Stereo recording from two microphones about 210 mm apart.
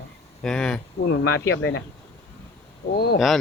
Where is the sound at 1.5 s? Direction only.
60° left (ahead or behind).